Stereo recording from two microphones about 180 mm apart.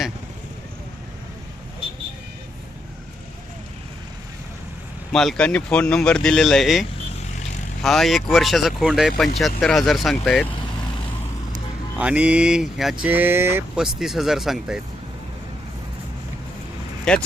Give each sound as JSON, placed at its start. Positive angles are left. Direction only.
{"t": 5.1, "sound": "speech", "side_deg": 5}
{"t": 11.9, "sound": "speech", "side_deg": -5}
{"t": 17.1, "sound": "speech", "side_deg": 5}